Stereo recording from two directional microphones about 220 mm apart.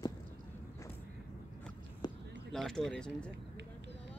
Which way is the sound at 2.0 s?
20° left (ahead or behind).